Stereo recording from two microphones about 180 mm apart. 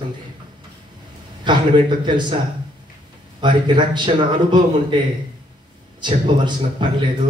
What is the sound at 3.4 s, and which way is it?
A man's voice, 25° right (ahead or behind).